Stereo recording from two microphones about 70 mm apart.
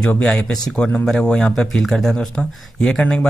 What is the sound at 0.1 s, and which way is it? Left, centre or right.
Speech, centre.